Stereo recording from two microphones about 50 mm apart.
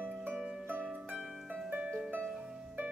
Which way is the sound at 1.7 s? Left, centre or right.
Right.